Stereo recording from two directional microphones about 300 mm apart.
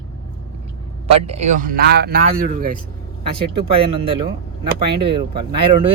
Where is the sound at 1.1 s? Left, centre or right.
Right.